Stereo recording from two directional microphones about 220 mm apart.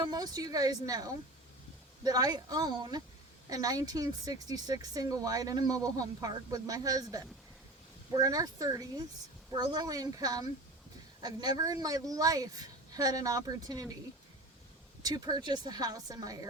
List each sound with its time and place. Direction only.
0.0 s speech: 20° right (ahead or behind)
15.0 s speech: 20° right (ahead or behind)